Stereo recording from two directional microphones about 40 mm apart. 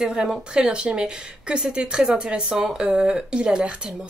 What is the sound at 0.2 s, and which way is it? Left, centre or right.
Speech, centre.